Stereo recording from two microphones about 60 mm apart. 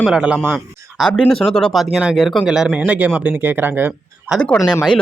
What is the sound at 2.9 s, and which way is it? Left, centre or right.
Speech, right.